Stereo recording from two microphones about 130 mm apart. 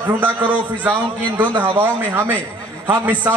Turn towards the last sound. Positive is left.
turn(degrees=-20)  # may be behind; listen again after turning